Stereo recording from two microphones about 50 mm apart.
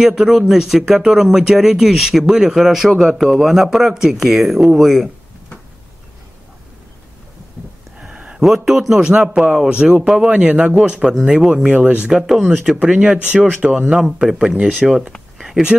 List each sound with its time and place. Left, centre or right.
0.0 s speech: centre
8.0 s a sound: right
8.6 s speech: centre; by 12.1 s right
12.1 s speech: centre
12.9 s speech: centre
15.3 s a sound: centre